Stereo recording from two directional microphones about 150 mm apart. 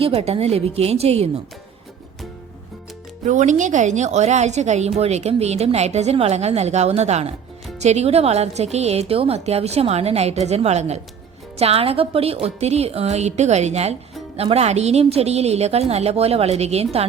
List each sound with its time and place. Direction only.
0.0 s a woman's voice: 40° right (ahead or behind)
3.2 s a woman's voice: 55° right (ahead or behind)